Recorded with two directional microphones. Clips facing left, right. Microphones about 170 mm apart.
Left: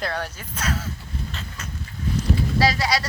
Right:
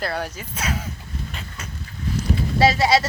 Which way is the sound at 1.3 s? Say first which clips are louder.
Even; 10° right (ahead or behind).